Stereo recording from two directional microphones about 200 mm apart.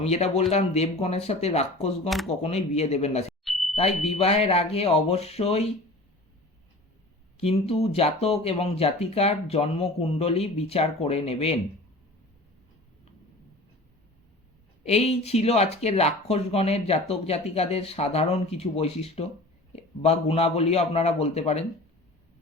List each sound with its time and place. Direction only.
0.0 s speech: 30° left (ahead or behind)
2.0 s speech: centre (ahead or behind)
2.4 s speech: 30° left (ahead or behind)
3.4 s a sound: centre (ahead or behind)
3.8 s speech: 30° left (ahead or behind)
7.3 s speech: 30° left (ahead or behind)
14.8 s speech: 30° left (ahead or behind)